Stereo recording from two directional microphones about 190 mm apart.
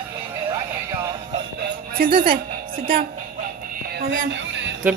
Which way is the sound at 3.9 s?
70° right (ahead or behind).